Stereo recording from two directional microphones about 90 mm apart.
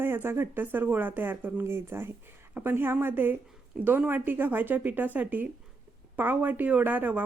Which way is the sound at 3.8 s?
10° right (ahead or behind).